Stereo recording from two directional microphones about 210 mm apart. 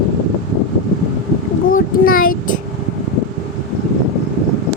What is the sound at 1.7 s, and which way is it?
Child singing, 45° left (ahead or behind).